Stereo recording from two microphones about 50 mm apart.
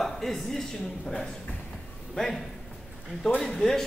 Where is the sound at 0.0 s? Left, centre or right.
Centre.